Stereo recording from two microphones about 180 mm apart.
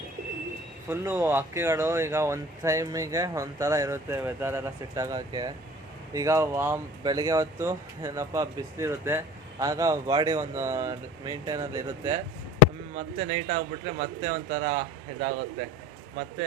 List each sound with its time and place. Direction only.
0.9 s speech: 15° right (ahead or behind)
13.1 s speech: 40° right (ahead or behind)